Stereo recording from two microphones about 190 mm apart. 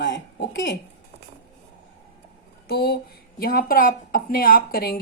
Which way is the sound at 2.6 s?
55° left (ahead or behind).